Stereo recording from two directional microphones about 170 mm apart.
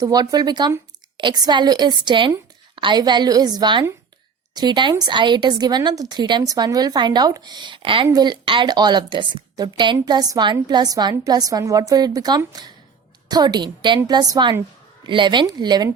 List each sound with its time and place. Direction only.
0.0 s a woman's voice: 20° right (ahead or behind)